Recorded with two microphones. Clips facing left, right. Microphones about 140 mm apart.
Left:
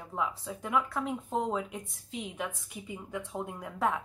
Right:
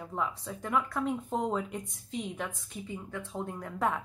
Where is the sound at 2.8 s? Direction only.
15° left (ahead or behind).